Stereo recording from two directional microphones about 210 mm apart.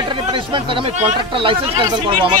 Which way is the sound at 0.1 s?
25° right (ahead or behind).